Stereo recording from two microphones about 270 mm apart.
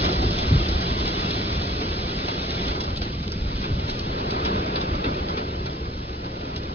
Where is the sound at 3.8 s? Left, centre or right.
Right.